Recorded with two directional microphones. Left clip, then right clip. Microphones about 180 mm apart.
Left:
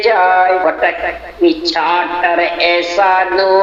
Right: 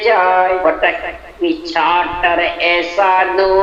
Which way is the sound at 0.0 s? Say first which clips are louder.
Left 2 dB; 45° left (ahead or behind).